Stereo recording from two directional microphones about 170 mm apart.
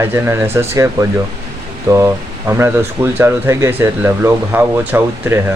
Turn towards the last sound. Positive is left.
turn(degrees=-15)  # may be behind; listen again after turning